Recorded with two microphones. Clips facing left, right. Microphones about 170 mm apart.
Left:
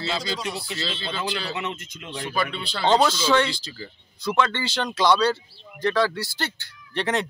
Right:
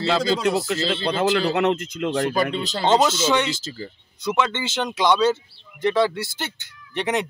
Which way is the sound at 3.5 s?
45° right (ahead or behind).